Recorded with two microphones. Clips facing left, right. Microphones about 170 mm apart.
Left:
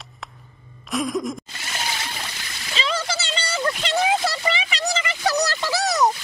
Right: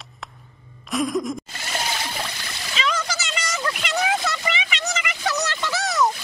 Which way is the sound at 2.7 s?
30° left (ahead or behind).